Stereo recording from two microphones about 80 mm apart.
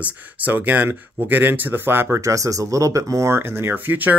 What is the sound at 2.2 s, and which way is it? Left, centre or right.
Speech, right.